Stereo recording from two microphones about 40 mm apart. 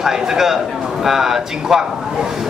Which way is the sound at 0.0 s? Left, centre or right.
Centre.